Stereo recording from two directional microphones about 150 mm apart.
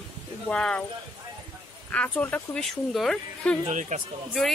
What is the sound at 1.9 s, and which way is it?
A woman's voice, 10° left (ahead or behind).